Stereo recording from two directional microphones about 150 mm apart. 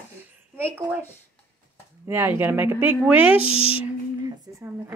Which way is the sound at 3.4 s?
40° left (ahead or behind).